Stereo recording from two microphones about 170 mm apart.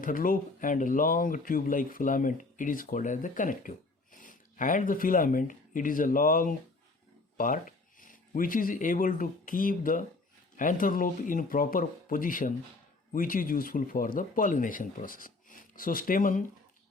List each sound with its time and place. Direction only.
0.0 s speech: 55° left (ahead or behind)